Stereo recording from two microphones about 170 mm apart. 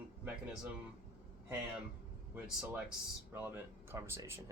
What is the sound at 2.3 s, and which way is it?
Speech, 5° right (ahead or behind).